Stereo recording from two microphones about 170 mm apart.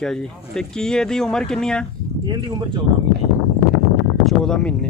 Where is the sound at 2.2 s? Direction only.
25° right (ahead or behind).